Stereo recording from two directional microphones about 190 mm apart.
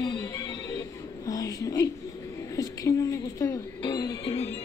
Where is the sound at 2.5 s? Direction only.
20° left (ahead or behind).